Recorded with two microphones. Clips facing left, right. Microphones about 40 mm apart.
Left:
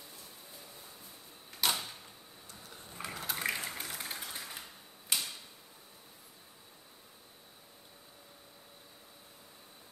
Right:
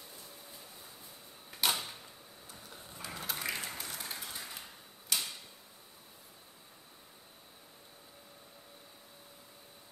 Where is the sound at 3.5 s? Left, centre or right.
Centre.